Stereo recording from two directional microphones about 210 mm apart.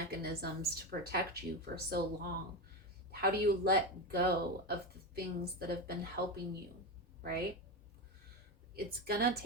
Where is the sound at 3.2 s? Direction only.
45° right (ahead or behind).